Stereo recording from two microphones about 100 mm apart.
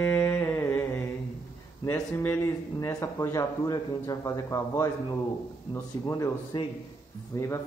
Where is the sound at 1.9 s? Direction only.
25° left (ahead or behind).